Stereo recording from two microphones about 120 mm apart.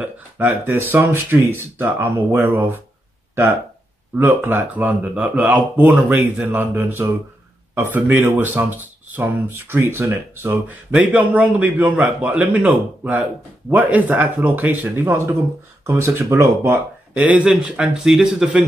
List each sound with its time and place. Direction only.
0.0 s speech: 15° right (ahead or behind)
4.2 s speech: 15° right (ahead or behind)
17.1 s speech: 10° right (ahead or behind)